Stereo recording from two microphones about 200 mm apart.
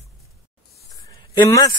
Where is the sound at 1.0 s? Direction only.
15° left (ahead or behind).